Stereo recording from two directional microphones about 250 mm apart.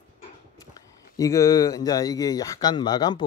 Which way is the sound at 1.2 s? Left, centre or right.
Centre.